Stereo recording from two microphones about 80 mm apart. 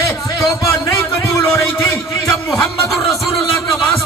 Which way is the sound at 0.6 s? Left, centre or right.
Left.